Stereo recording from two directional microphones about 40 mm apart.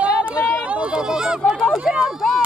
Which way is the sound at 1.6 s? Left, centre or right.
Right.